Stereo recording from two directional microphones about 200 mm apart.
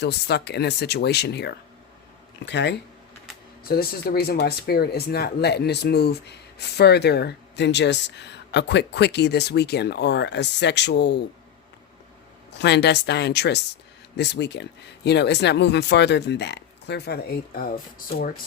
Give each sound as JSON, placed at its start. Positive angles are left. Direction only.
{"t": 0.0, "sound": "speech", "side_deg": 55}
{"t": 3.6, "sound": "speech", "side_deg": 50}
{"t": 12.5, "sound": "speech", "side_deg": 60}